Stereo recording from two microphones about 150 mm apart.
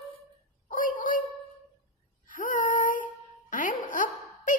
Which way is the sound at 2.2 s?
65° left (ahead or behind).